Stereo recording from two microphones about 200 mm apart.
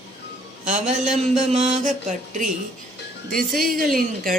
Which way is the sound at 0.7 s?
35° right (ahead or behind).